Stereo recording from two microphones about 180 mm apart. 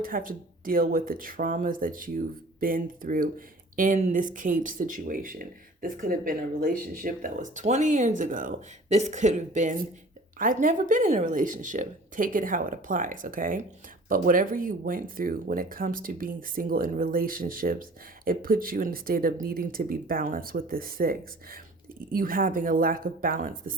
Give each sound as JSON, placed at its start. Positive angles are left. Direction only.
{"t": 0.0, "sound": "speech", "side_deg": -50}